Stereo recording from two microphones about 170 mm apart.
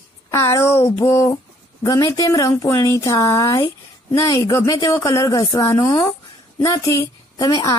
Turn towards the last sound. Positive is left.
turn(degrees=20)  # may be behind; listen again after turning